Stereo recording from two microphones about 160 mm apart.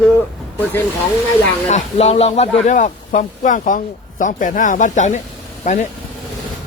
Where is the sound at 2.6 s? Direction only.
55° left (ahead or behind).